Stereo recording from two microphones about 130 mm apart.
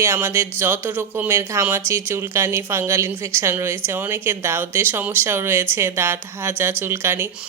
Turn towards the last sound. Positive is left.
turn(degrees=-15)  # may be behind; listen again after turning